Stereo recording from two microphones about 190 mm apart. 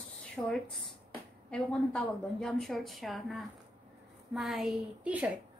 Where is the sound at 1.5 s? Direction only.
5° left (ahead or behind).